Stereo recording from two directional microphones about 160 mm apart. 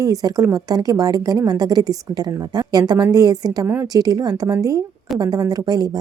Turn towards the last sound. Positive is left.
turn(degrees=-25)  # may be behind; listen again after turning